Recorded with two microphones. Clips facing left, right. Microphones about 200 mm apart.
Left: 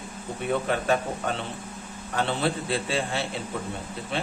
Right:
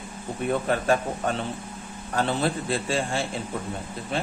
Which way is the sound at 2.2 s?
40° right (ahead or behind).